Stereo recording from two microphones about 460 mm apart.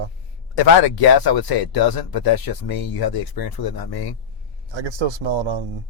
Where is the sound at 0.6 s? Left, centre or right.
Left.